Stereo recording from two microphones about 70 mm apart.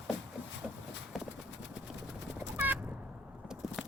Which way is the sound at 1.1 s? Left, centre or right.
Centre.